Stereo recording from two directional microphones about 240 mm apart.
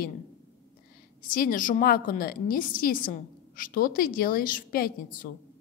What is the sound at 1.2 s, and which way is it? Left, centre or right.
A woman's voice, left.